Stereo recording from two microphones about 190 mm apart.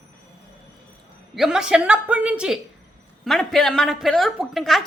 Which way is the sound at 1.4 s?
5° right (ahead or behind).